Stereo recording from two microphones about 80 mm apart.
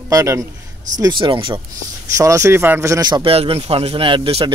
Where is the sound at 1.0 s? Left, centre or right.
Right.